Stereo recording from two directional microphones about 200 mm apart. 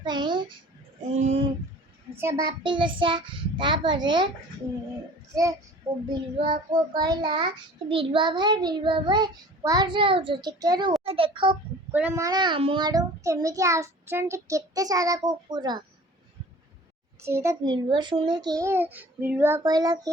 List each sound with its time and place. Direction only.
0.0 s a sound: 25° right (ahead or behind)
1.0 s speech: 35° right (ahead or behind)
2.1 s child singing: 15° right (ahead or behind)
5.3 s a child's voice: 15° right (ahead or behind)
6.1 s child singing: 20° right (ahead or behind)
11.0 s a child's voice: 30° right (ahead or behind)
11.9 s a child's voice: 10° right (ahead or behind)
17.2 s a child's voice: 15° right (ahead or behind)
17.8 s child singing: 25° right (ahead or behind)